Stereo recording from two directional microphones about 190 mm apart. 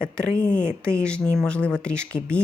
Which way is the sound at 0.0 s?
5° left (ahead or behind).